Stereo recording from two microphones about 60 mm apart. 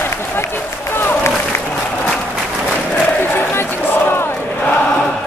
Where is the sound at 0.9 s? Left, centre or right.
Left.